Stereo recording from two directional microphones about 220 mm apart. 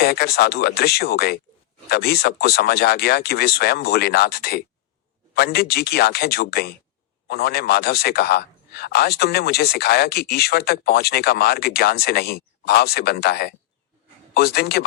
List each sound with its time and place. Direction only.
0.0 s speech: 45° left (ahead or behind)